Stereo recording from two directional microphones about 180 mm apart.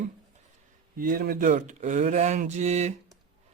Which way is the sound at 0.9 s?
50° right (ahead or behind).